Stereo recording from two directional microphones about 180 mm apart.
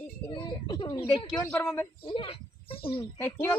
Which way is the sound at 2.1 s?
30° left (ahead or behind).